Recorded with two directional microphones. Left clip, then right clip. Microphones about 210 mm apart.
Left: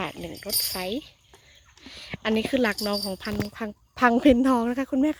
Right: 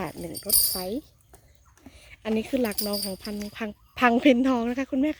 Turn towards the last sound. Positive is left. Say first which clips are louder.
# left 2 dB
turn(degrees=10)  # may be behind; listen again after turning